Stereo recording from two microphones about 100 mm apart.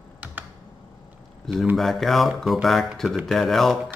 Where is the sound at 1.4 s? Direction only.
Centre (ahead or behind).